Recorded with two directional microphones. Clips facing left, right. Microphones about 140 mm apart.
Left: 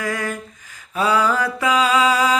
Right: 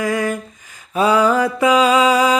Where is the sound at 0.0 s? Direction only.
15° right (ahead or behind).